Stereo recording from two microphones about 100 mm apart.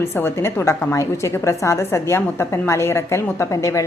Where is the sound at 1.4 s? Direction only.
30° left (ahead or behind).